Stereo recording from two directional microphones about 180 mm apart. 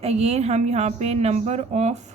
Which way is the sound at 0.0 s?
35° right (ahead or behind).